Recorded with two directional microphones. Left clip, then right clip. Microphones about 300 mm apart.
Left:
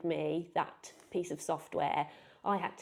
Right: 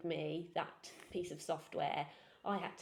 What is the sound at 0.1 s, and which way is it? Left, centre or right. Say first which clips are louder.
Speech: left 7 dB; left.